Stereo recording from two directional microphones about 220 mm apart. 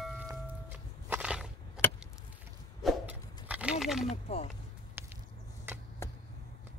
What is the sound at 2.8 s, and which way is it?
Wild animals, 5° right (ahead or behind).